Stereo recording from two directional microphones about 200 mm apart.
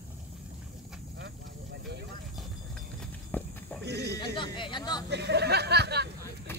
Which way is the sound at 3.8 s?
55° right (ahead or behind).